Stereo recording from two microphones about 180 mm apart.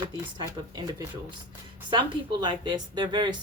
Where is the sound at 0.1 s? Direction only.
25° right (ahead or behind).